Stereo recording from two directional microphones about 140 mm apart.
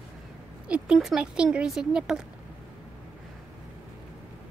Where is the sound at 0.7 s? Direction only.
5° right (ahead or behind).